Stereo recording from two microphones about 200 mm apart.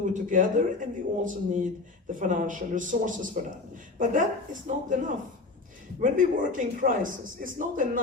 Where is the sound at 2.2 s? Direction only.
40° right (ahead or behind).